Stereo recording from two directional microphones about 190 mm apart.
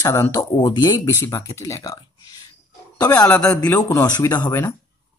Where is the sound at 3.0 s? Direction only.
10° left (ahead or behind).